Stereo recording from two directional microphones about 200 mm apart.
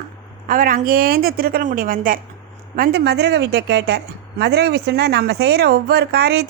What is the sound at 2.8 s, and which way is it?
Speech, 55° right (ahead or behind).